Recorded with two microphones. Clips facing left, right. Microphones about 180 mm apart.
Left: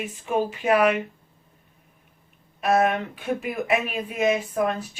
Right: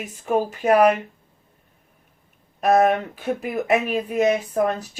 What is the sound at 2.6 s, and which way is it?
Speech, 40° right (ahead or behind).